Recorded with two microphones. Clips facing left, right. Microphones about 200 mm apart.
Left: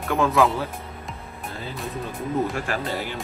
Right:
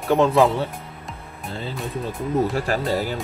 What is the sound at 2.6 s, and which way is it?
Speech, 40° right (ahead or behind).